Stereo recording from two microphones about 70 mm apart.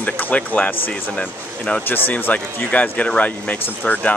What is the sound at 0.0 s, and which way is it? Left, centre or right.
Speech, left.